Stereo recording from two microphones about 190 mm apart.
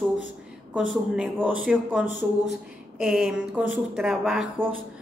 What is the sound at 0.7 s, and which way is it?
A woman's voice, 5° right (ahead or behind).